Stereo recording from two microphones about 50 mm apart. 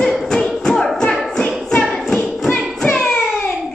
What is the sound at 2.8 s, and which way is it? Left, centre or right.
Child singing, centre.